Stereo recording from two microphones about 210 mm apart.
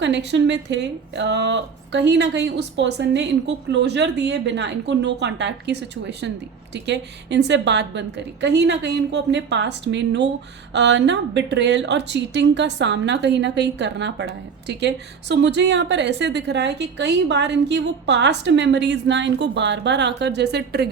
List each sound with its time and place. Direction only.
0.0 s a woman's voice: 55° right (ahead or behind)